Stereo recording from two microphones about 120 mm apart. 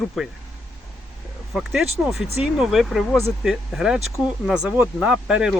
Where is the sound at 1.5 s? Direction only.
5° right (ahead or behind).